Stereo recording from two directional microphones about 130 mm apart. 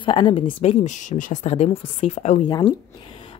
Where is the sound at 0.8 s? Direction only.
70° left (ahead or behind).